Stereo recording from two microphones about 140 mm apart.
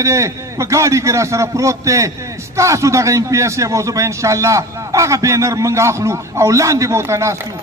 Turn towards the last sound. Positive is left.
turn(degrees=-20)  # may be behind; listen again after turning